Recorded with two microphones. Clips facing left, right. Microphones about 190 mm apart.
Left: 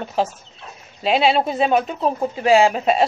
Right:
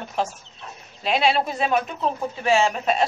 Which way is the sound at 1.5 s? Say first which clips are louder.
Left 5 dB; 35° left (ahead or behind).